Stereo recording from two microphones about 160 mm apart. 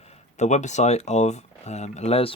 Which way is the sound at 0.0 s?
45° left (ahead or behind).